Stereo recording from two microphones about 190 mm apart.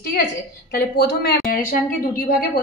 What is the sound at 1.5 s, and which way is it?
Speech, 45° left (ahead or behind).